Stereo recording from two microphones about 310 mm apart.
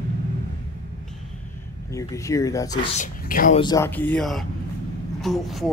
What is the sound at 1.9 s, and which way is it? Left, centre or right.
Speech, centre.